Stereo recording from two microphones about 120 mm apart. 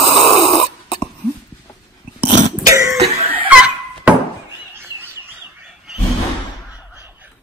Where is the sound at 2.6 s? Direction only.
25° right (ahead or behind).